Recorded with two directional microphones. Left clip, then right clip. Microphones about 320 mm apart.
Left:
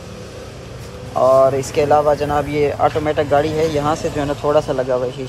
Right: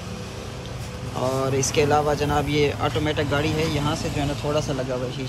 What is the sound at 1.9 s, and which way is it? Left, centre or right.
Speech, centre.